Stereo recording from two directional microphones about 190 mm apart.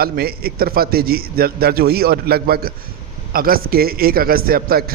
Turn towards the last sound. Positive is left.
turn(degrees=-50)  # may be behind; listen again after turning